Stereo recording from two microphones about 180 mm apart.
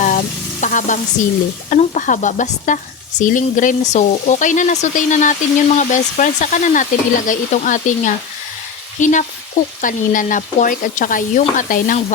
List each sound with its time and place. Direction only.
0.6 s stir: 45° left (ahead or behind)
1.7 s frying: 45° left (ahead or behind)